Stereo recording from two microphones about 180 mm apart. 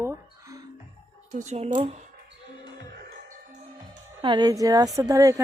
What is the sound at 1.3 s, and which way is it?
Speech, 40° right (ahead or behind).